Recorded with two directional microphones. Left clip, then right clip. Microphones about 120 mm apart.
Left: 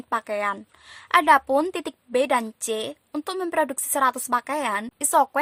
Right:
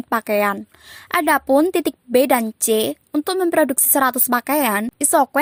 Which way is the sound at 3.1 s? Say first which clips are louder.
Right 7 dB; 35° right (ahead or behind).